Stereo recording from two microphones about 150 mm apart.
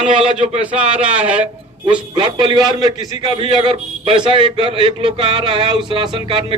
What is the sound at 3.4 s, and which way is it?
A man's voice, 35° right (ahead or behind).